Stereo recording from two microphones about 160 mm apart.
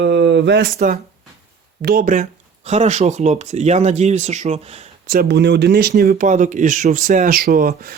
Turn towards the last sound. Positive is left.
turn(degrees=-65)  # may be behind; listen again after turning